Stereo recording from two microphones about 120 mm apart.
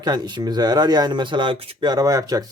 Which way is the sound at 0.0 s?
35° right (ahead or behind).